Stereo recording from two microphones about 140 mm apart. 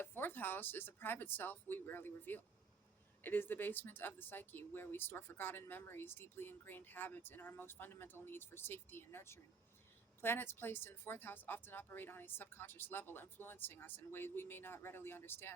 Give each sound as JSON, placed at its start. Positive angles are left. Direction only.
{"t": 0.0, "sound": "speech", "side_deg": 15}